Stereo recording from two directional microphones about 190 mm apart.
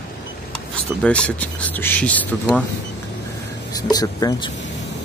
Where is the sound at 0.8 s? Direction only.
5° left (ahead or behind).